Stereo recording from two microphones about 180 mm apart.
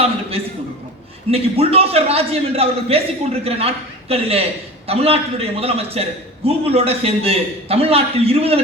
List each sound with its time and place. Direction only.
0.0 s a man's voice: 35° right (ahead or behind)